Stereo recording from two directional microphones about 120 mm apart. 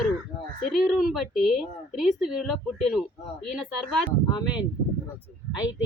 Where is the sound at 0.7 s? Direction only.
5° right (ahead or behind).